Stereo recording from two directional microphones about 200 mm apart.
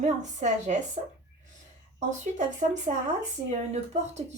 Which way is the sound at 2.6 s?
35° right (ahead or behind).